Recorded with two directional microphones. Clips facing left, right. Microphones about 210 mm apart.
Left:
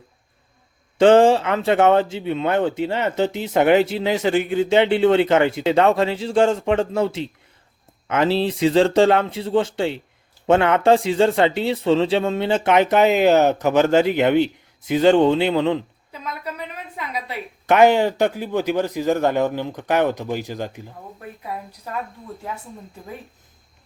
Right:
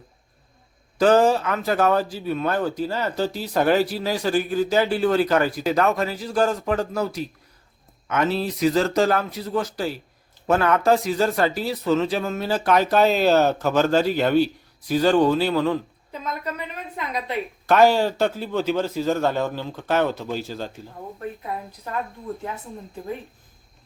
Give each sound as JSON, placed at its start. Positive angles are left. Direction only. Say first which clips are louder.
{"t": 0.9, "sound": "speech", "louder": "left 4 dB", "side_deg": 25}
{"t": 17.7, "sound": "speech", "louder": "left 2 dB", "side_deg": 20}